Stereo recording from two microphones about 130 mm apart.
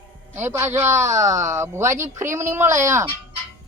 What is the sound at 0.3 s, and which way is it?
A woman's voice, 20° right (ahead or behind).